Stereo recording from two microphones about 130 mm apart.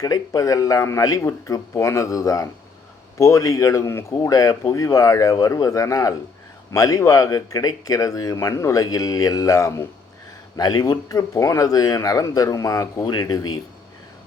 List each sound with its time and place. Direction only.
0.0 s speech: 25° left (ahead or behind)